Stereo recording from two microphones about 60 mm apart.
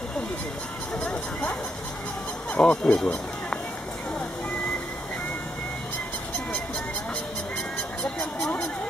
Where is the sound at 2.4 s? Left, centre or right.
Centre.